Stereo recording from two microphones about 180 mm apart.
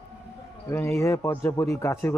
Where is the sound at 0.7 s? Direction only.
15° left (ahead or behind).